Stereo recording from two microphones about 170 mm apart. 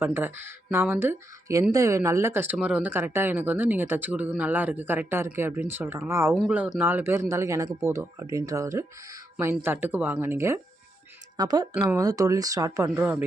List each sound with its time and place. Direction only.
0.0 s speech: 15° right (ahead or behind)